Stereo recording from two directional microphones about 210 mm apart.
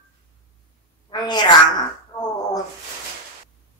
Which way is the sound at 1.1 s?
20° left (ahead or behind).